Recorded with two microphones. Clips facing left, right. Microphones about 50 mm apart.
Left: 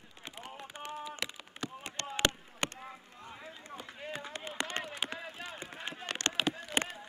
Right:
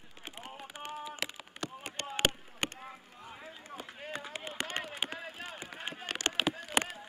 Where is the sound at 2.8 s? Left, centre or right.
Centre.